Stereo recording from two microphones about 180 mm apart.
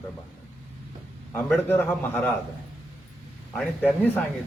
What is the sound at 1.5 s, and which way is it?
Speech, 10° left (ahead or behind).